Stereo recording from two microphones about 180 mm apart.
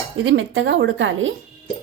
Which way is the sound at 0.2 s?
85° right.